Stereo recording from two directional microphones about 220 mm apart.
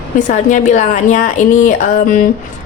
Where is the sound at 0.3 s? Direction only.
35° left (ahead or behind).